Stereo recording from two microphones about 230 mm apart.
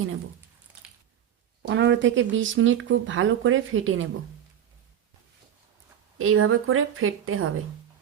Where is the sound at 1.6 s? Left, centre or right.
Right.